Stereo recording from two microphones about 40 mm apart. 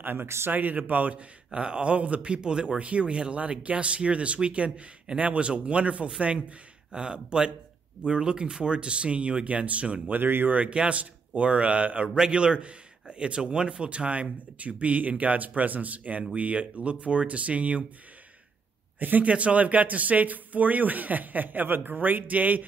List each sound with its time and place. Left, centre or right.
0.0 s speech: right
0.5 s speech: right
1.1 s speech: right
2.8 s speech: right
6.9 s speech: right
10.0 s speech: right
10.7 s speech: right
18.9 s speech: right
19.2 s speech: right